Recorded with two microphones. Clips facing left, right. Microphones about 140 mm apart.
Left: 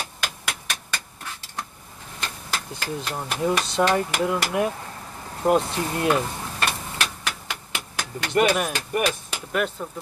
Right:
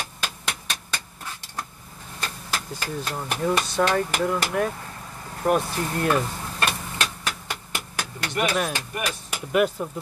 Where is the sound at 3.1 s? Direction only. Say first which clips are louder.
Even; 15° left (ahead or behind).